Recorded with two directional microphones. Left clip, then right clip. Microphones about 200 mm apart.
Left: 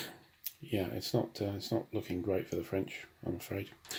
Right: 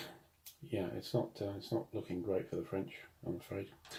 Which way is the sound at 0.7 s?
50° left (ahead or behind).